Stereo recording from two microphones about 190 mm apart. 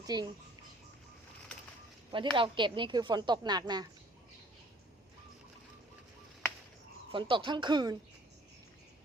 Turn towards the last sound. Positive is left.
turn(degrees=-25)  # may be behind; listen again after turning